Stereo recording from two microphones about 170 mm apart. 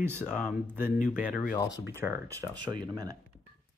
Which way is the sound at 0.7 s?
10° right (ahead or behind).